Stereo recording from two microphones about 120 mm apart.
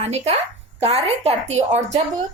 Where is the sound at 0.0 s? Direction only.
65° right (ahead or behind).